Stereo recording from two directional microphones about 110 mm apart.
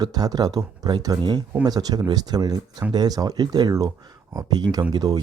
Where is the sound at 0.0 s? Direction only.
35° right (ahead or behind).